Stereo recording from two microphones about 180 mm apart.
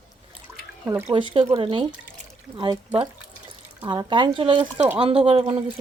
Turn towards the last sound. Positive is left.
turn(degrees=-30)  # may be behind; listen again after turning